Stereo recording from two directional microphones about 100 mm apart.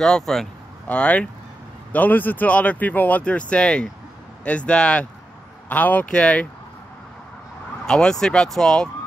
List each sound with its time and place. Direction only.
0.0 s speech: 5° left (ahead or behind)
7.8 s speech: 5° left (ahead or behind)